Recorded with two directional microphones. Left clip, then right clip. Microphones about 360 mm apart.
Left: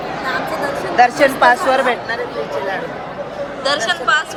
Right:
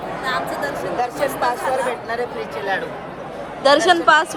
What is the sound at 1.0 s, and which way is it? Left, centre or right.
Speech, left.